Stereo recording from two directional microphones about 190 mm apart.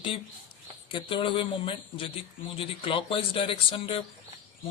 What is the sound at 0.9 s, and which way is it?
A man's voice, 25° left (ahead or behind).